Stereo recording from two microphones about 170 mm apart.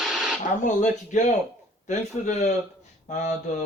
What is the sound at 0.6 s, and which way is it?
Speech, 45° left (ahead or behind).